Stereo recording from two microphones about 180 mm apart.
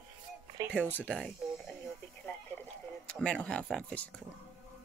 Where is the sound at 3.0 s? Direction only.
5° left (ahead or behind).